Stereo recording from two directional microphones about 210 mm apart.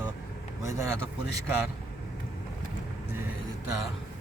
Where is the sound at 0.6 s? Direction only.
15° right (ahead or behind).